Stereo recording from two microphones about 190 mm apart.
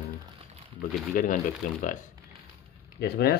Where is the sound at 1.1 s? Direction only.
45° left (ahead or behind).